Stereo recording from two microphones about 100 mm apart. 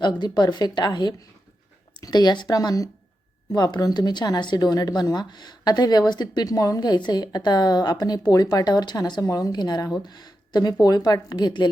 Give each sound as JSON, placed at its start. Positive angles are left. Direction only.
{"t": 0.0, "sound": "speech", "side_deg": 45}